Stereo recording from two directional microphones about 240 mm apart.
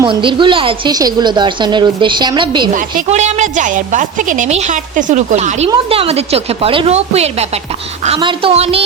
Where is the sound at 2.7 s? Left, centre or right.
Right.